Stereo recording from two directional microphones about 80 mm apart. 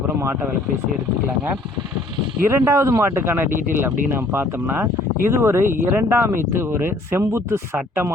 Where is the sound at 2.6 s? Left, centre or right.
Right.